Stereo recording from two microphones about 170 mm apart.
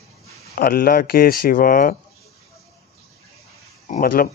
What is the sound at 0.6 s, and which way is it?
Speech, 60° left (ahead or behind).